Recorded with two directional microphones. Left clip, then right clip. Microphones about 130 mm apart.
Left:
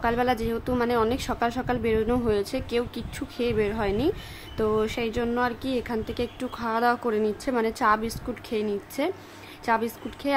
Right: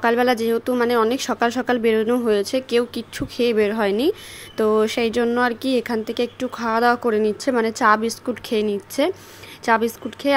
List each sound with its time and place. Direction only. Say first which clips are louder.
0.0 s speech: right 7 dB; 35° right (ahead or behind)